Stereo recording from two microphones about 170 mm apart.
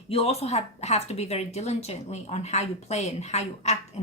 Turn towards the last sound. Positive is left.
turn(degrees=40)  # may be behind; listen again after turning